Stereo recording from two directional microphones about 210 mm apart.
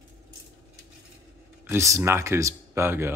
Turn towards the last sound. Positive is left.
turn(degrees=-10)  # may be behind; listen again after turning